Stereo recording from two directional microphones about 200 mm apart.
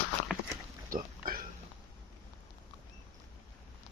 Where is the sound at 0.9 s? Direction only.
45° right (ahead or behind).